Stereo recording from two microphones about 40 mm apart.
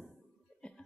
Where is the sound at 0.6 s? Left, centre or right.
Left.